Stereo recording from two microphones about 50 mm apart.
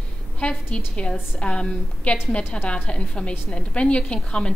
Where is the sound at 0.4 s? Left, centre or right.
Left.